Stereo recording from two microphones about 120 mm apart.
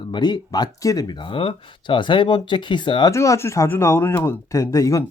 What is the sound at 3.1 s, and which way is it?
Speech, 25° left (ahead or behind).